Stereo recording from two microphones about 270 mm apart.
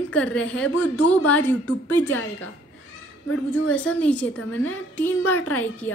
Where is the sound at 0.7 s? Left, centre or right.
Left.